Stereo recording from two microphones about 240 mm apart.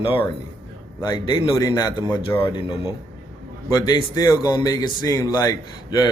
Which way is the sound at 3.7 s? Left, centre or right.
Centre.